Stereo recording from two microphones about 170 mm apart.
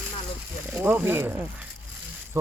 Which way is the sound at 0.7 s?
10° right (ahead or behind).